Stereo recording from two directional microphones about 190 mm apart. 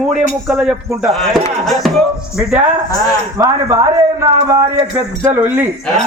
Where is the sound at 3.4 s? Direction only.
15° right (ahead or behind).